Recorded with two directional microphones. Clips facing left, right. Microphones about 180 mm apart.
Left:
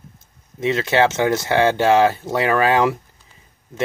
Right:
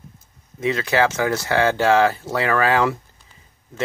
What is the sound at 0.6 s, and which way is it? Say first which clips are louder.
Speech: left 2 dB; 25° left (ahead or behind).